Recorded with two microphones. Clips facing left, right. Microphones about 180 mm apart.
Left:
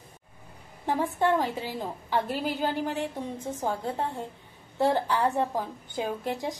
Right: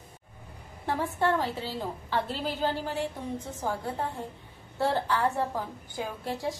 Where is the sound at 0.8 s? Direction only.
15° left (ahead or behind).